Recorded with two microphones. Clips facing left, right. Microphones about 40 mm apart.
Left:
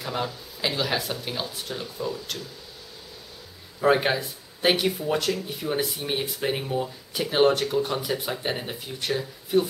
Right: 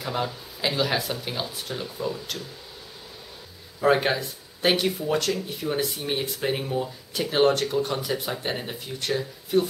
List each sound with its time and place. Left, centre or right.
0.0 s speech: centre
3.8 s speech: centre